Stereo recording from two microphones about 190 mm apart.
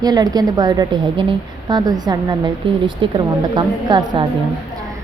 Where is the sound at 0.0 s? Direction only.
20° right (ahead or behind).